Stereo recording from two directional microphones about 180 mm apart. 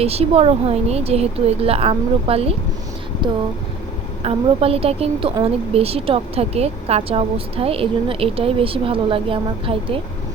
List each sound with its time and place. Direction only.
0.0 s a woman's voice: 35° right (ahead or behind)